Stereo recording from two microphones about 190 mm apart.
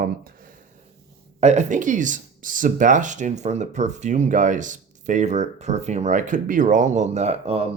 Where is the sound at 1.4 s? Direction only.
35° right (ahead or behind).